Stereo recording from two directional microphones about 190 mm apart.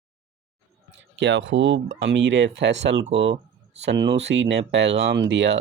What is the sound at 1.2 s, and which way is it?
Speech, 75° right (ahead or behind).